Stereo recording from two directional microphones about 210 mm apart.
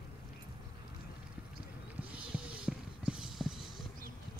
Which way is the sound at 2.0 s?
5° right (ahead or behind).